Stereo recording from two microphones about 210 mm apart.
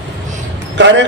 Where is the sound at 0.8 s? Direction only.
55° right (ahead or behind).